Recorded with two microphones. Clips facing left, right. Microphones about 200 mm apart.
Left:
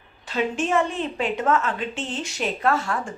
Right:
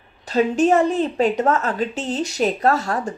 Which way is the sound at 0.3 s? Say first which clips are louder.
Right 8 dB; 40° right (ahead or behind).